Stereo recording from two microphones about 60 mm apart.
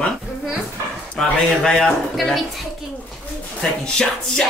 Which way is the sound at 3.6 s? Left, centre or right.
Centre.